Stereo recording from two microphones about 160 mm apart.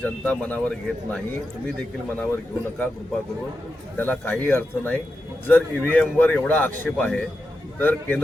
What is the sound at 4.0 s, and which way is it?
A man's voice, 10° left (ahead or behind).